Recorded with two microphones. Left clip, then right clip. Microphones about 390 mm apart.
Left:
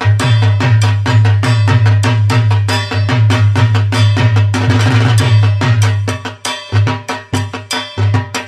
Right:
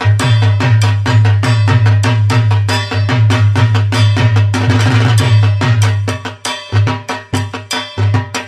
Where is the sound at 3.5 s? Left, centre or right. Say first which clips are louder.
Even; centre.